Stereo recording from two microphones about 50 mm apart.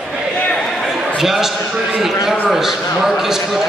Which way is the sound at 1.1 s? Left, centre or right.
Centre.